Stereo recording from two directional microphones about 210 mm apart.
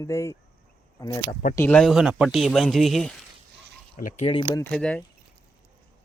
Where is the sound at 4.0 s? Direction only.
40° left (ahead or behind).